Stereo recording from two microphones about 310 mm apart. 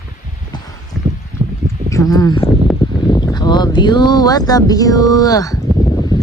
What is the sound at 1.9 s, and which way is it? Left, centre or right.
Speech, centre.